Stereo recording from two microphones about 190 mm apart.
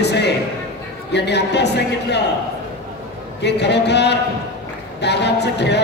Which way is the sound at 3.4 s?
65° left (ahead or behind).